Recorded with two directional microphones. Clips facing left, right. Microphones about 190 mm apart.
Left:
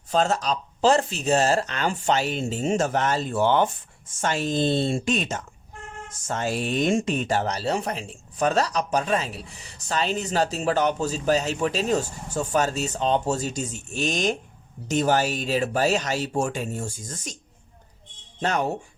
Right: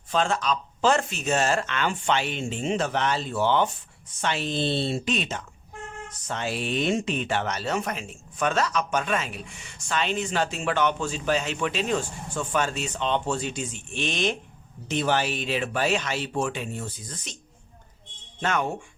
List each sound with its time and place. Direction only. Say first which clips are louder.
0.1 s speech: left 2 dB; 40° left (ahead or behind)
18.3 s speech: left 2 dB; 35° left (ahead or behind)